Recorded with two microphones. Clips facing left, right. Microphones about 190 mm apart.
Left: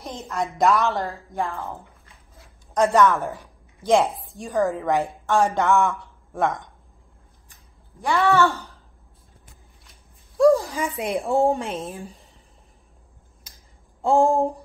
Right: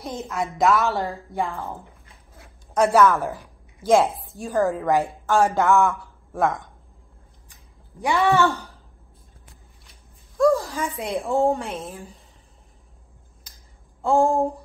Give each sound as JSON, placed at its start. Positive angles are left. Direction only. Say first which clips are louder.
{"t": 0.2, "sound": "speech", "louder": "left 1 dB", "side_deg": 0}
{"t": 2.7, "sound": "a woman's voice", "louder": "right 1 dB", "side_deg": -5}
{"t": 8.0, "sound": "speech", "louder": "even", "side_deg": -15}
{"t": 10.3, "sound": "a woman's voice", "louder": "left 2 dB", "side_deg": 15}
{"t": 14.0, "sound": "speech", "louder": "left 1 dB", "side_deg": 15}